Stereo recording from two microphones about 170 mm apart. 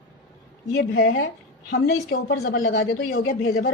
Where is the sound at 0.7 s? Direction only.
75° left (ahead or behind).